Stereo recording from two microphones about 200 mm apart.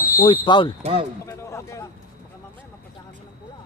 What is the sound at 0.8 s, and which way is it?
Speech, 30° right (ahead or behind).